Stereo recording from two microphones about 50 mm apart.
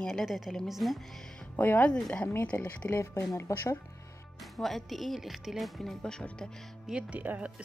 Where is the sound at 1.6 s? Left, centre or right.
Left.